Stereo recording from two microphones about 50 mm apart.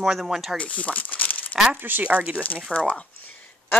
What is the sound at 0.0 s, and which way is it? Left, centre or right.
Speech, centre.